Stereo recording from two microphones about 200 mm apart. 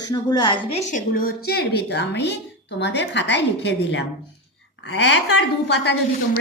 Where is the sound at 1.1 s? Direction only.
45° left (ahead or behind).